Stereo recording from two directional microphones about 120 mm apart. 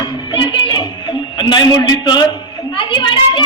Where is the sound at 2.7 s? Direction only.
40° left (ahead or behind).